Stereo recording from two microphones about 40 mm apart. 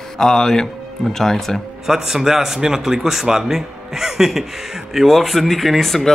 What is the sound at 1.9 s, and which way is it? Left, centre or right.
A man's voice, centre.